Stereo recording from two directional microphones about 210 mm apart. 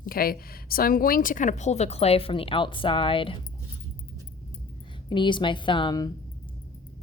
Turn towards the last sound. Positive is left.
turn(degrees=20)  # may be behind; listen again after turning